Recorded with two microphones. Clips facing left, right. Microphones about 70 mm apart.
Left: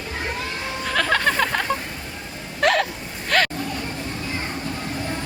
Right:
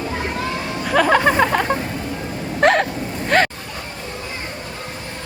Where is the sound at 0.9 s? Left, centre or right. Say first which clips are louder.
Right 6 dB; centre.